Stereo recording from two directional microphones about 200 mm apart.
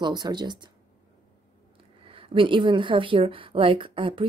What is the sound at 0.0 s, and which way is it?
Speech, 20° right (ahead or behind).